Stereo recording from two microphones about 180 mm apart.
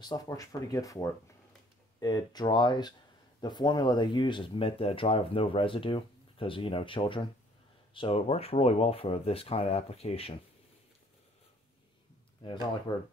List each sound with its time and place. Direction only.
0.0 s speech: 20° left (ahead or behind)
12.9 s speech: 25° left (ahead or behind)